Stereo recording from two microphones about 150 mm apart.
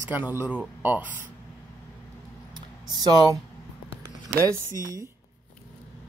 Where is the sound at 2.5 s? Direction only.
25° right (ahead or behind).